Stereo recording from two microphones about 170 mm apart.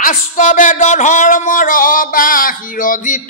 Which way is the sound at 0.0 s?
50° left (ahead or behind).